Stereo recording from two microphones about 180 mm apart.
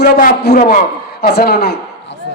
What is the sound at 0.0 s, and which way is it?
A man's voice, 55° left (ahead or behind).